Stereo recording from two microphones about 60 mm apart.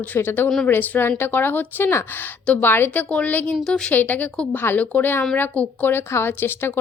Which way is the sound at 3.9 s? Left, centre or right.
Left.